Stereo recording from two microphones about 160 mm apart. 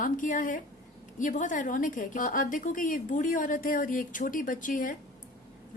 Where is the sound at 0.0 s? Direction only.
55° left (ahead or behind).